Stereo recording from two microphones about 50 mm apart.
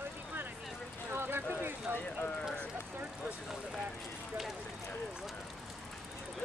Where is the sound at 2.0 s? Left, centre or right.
Left.